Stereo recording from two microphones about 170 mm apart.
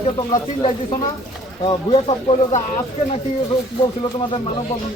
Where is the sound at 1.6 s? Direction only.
25° left (ahead or behind).